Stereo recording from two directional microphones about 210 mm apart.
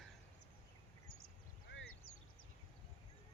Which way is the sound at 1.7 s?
65° left (ahead or behind).